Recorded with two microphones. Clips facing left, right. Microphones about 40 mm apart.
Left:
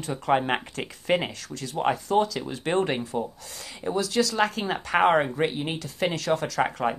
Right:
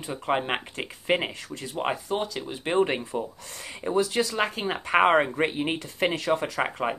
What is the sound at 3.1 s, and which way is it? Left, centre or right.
Speech, centre.